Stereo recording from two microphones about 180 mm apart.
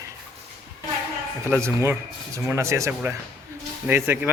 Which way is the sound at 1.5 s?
15° right (ahead or behind).